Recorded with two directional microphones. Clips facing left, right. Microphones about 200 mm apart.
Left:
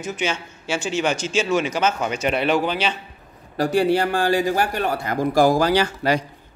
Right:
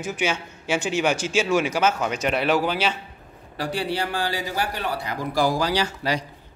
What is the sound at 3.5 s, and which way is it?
Speech, 45° left (ahead or behind).